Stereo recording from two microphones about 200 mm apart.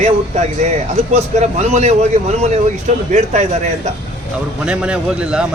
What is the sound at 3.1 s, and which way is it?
Speech, 35° right (ahead or behind).